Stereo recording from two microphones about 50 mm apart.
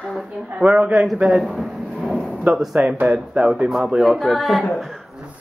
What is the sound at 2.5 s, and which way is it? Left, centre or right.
Speech, right.